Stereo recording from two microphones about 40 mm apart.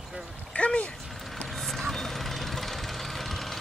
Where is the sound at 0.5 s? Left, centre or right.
Left.